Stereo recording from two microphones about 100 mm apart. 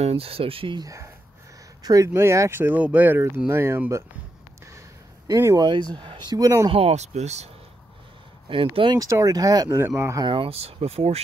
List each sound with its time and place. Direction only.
0.0 s speech: 75° right (ahead or behind)
0.7 s speech: 35° right (ahead or behind)
2.1 s speech: 30° right (ahead or behind)
5.6 s speech: 45° right (ahead or behind)
6.7 s speech: 85° right
8.5 s speech: 60° right (ahead or behind)
8.9 s speech: 35° right (ahead or behind)
9.8 s speech: 25° right (ahead or behind)
10.2 s speech: 60° right (ahead or behind); by 11.1 s 90° right